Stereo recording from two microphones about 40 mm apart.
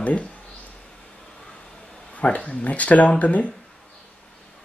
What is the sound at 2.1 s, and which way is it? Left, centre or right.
Speech, left.